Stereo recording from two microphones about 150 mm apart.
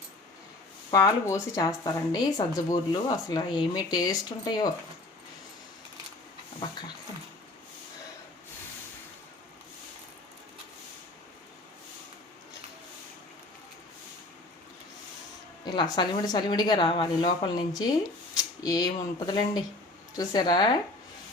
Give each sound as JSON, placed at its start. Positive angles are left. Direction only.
{"t": 0.9, "sound": "speech", "side_deg": 25}
{"t": 15.6, "sound": "speech", "side_deg": 30}